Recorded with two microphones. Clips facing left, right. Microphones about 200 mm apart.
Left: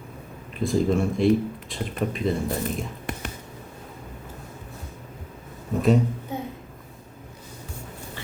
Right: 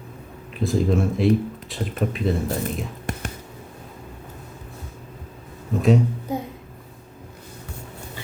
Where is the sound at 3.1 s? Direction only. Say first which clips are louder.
Right 3 dB; 45° right (ahead or behind).